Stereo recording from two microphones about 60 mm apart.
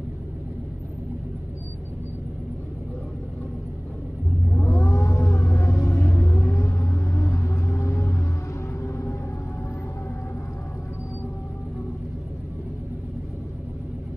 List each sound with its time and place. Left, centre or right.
4.6 s vehicle: left
5.9 s rumble: left
8.8 s music: left